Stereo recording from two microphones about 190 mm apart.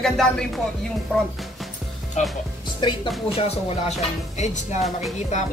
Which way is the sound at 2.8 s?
25° left (ahead or behind).